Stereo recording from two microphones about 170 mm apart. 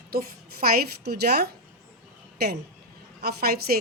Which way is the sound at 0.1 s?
60° right (ahead or behind).